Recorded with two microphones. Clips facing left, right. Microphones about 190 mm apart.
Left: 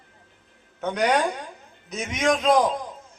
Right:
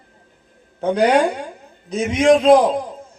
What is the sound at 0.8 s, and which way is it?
A man's voice, 30° right (ahead or behind).